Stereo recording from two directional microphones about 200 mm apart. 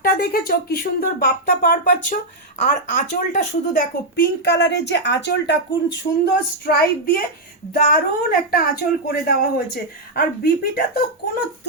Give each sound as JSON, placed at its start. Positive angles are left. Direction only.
{"t": 0.0, "sound": "a woman's voice", "side_deg": 45}